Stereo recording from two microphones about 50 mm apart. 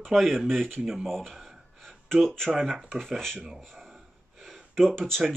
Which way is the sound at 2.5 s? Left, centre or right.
Centre.